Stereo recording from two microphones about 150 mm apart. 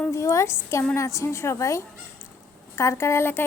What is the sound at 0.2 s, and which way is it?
A woman's voice, 20° left (ahead or behind).